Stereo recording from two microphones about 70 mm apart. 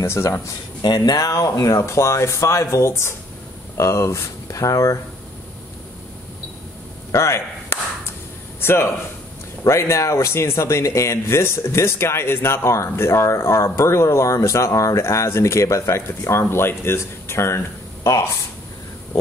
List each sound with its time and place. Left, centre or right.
0.0 s speech: left
0.8 s speech: left
7.1 s a sound: left
8.5 s a man's voice: left